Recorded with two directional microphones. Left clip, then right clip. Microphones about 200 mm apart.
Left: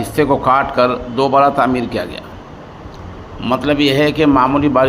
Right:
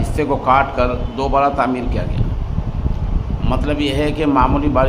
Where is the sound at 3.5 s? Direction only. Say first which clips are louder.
Left 6 dB; 20° left (ahead or behind).